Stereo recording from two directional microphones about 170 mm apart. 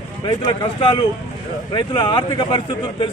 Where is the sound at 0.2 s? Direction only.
25° left (ahead or behind).